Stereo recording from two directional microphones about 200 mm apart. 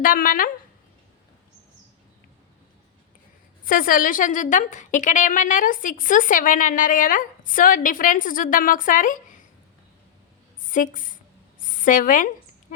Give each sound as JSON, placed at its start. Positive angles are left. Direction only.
{"t": 0.0, "sound": "speech", "side_deg": 45}
{"t": 3.7, "sound": "a woman's voice", "side_deg": 45}
{"t": 10.7, "sound": "a woman's voice", "side_deg": 40}